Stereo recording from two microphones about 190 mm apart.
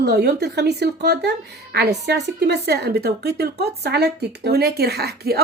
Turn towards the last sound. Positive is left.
turn(degrees=-55)  # may be behind; listen again after turning